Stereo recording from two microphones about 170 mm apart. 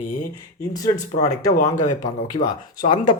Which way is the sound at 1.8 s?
50° left (ahead or behind).